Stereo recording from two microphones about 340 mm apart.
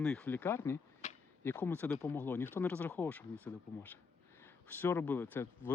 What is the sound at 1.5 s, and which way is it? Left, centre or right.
Speech, centre.